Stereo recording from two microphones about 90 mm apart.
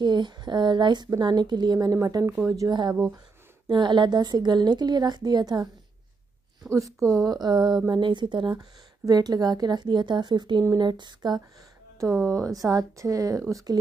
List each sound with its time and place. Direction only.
0.0 s a woman's voice: 55° right (ahead or behind); by 2.7 s 35° right (ahead or behind)
2.7 s a woman's voice: 50° right (ahead or behind)
3.6 s a woman's voice: 55° right (ahead or behind)
6.7 s a woman's voice: 35° right (ahead or behind); by 8.6 s 55° right (ahead or behind)
9.0 s a woman's voice: 45° right (ahead or behind)
12.4 s a woman's voice: 40° right (ahead or behind)